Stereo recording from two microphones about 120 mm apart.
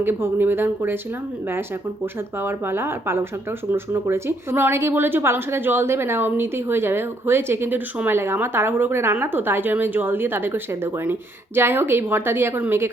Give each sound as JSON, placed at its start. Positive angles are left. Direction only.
{"t": 0.0, "sound": "speech", "side_deg": -20}
{"t": 2.4, "sound": "a woman's voice", "side_deg": -20}